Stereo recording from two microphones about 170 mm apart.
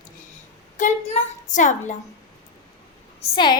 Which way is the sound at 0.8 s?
50° left (ahead or behind).